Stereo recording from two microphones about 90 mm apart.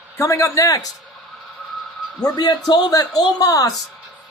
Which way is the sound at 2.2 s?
50° left (ahead or behind).